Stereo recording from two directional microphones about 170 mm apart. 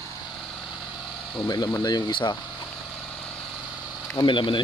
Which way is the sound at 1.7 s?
25° left (ahead or behind).